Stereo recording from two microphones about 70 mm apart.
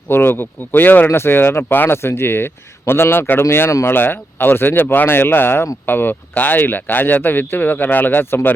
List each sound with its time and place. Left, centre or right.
0.1 s speech: left